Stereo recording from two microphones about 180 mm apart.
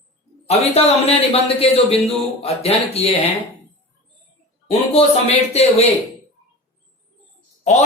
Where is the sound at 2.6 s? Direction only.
35° left (ahead or behind).